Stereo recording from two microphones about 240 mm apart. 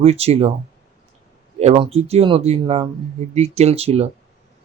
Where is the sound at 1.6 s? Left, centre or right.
Right.